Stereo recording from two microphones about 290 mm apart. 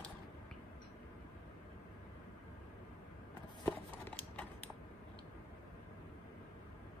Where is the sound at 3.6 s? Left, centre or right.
Centre.